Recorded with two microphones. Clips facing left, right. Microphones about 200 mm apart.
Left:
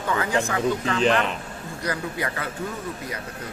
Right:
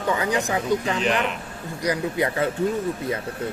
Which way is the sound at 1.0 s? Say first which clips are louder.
Left 2 dB; 35° left (ahead or behind).